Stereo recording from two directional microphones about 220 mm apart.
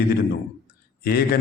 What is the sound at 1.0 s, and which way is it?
Speech, 45° left (ahead or behind).